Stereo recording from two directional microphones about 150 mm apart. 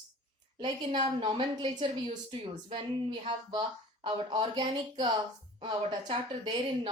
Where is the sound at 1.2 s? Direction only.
30° right (ahead or behind).